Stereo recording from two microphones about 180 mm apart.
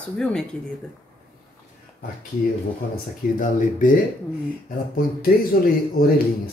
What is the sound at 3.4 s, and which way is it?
Speech, 45° left (ahead or behind).